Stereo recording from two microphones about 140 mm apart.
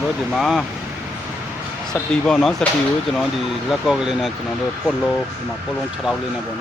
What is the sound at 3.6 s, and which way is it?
Speech, 5° right (ahead or behind).